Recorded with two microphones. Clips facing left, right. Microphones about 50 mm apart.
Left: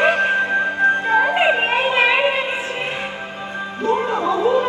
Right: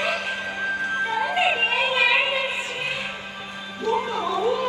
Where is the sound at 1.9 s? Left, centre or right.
Left.